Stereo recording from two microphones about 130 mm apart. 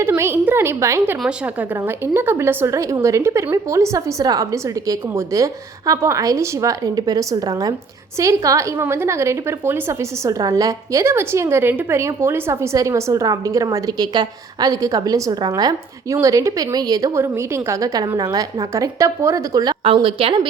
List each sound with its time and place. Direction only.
0.0 s a woman's voice: 20° right (ahead or behind)
1.2 s a woman's voice: 10° right (ahead or behind); by 19.7 s 25° right (ahead or behind)
19.8 s a woman's voice: 45° right (ahead or behind)